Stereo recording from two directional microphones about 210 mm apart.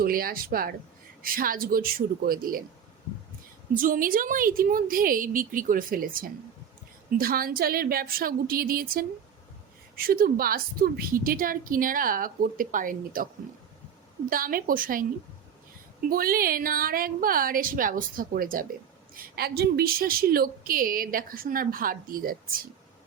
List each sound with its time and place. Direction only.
0.0 s a woman's voice: 45° right (ahead or behind)
3.8 s a woman's voice: 40° right (ahead or behind)
14.3 s a woman's voice: 40° right (ahead or behind)